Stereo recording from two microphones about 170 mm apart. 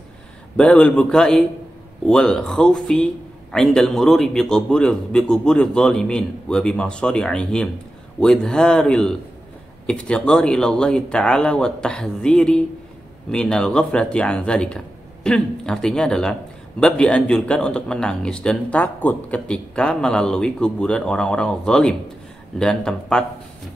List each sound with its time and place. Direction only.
0.6 s speech: 5° left (ahead or behind)